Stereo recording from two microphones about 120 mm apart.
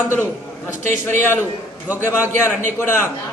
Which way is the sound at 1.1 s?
15° left (ahead or behind).